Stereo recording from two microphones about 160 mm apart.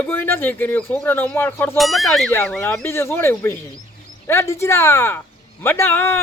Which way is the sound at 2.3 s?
15° left (ahead or behind).